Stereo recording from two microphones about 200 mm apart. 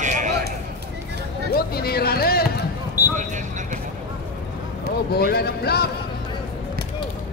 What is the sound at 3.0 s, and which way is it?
Basketball bounce, 10° right (ahead or behind).